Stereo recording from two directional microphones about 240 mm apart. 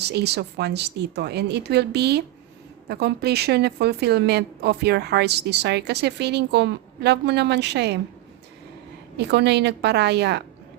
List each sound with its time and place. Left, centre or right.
0.0 s a woman's voice: right
9.1 s a woman's voice: right